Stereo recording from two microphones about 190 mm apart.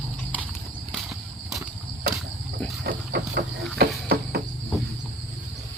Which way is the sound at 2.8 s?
55° right (ahead or behind).